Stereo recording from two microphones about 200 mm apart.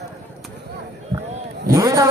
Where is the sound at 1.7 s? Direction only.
15° right (ahead or behind).